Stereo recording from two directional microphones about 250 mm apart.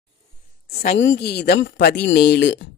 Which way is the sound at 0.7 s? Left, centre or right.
Left.